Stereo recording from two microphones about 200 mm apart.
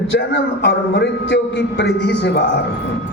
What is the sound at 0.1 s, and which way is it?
A man's voice, 60° left (ahead or behind).